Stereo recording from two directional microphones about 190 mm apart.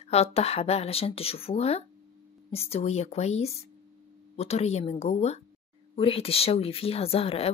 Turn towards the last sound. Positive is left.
turn(degrees=30)  # may be behind; listen again after turning